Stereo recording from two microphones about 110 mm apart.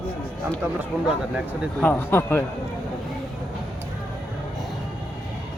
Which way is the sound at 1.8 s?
20° left (ahead or behind).